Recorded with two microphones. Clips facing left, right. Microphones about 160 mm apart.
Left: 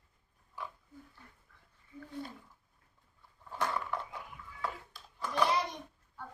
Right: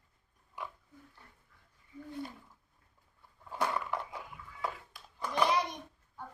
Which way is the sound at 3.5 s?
10° right (ahead or behind).